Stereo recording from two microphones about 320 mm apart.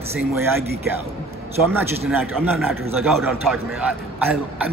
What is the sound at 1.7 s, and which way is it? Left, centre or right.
A man's voice, centre.